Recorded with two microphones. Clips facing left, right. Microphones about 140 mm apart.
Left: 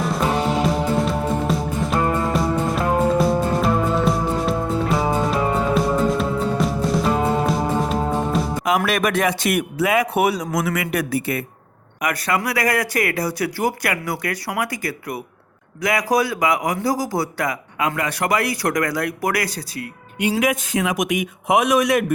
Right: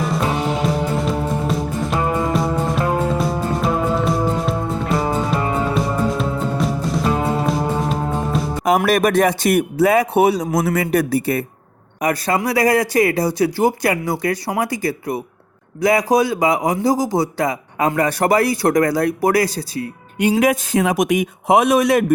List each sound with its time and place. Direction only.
0.0 s music: centre (ahead or behind)
8.6 s a man's voice: 40° right (ahead or behind)